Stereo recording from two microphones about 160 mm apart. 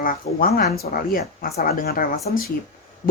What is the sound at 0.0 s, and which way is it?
Speech, 65° left (ahead or behind).